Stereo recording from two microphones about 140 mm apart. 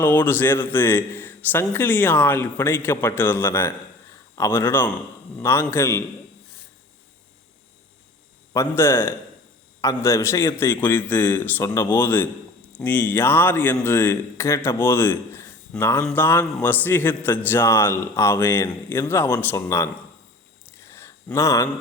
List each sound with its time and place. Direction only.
0.0 s a man's voice: 15° left (ahead or behind)
8.5 s a man's voice: 20° left (ahead or behind)
20.7 s a sound: 20° left (ahead or behind)